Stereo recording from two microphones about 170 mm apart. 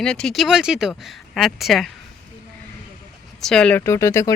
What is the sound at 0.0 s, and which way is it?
Speech, 5° left (ahead or behind).